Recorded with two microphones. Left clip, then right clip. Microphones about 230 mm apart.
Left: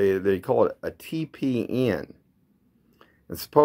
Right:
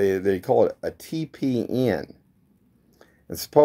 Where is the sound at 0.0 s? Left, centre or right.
Centre.